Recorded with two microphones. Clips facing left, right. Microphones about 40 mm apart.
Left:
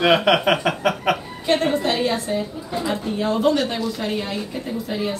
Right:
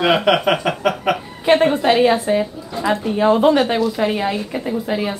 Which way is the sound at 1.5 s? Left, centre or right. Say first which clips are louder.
Right 6 dB; centre.